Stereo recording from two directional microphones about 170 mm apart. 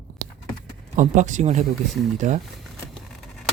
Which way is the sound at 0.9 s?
45° right (ahead or behind).